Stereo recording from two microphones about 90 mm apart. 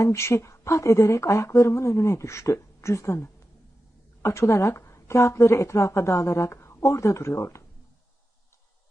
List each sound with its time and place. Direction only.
0.0 s speech: 30° left (ahead or behind)